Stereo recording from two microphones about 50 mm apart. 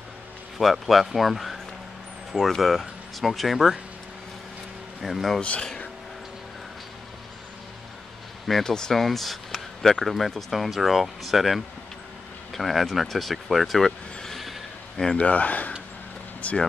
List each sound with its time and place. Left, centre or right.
0.6 s speech: centre
5.0 s speech: centre
5.4 s speech: left
8.5 s speech: centre
9.0 s speech: centre
15.1 s speech: left
16.3 s vehicle: left